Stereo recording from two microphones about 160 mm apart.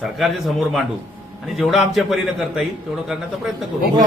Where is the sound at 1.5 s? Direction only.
Centre (ahead or behind).